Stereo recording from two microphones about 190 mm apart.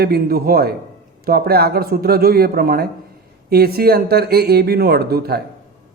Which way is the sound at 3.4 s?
55° right (ahead or behind).